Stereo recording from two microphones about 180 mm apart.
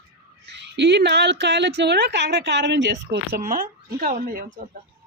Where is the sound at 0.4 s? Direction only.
75° right (ahead or behind).